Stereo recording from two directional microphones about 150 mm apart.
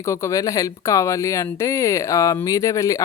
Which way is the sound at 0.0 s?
20° left (ahead or behind).